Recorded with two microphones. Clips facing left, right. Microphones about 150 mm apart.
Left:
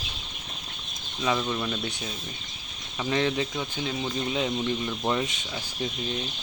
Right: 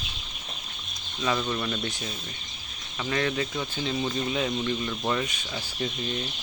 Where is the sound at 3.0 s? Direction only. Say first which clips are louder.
Left 2 dB; 15° left (ahead or behind).